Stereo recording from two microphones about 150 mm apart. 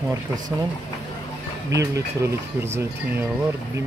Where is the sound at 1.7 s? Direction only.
20° right (ahead or behind).